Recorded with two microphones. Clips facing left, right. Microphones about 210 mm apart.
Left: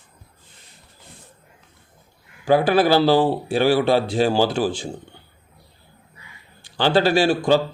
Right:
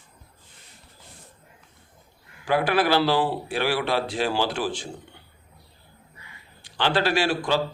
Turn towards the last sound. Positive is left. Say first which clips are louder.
# left 6 dB
turn(degrees=30)  # may be behind; listen again after turning